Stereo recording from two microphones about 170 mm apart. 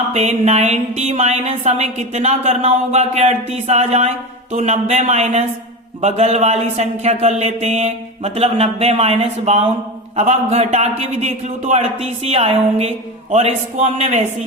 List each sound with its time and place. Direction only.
0.1 s speech: 40° right (ahead or behind)